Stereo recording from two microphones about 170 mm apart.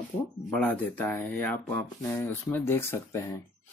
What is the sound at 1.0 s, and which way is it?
Speech, 15° left (ahead or behind).